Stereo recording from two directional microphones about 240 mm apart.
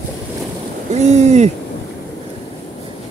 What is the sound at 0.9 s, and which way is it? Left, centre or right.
Speech, right.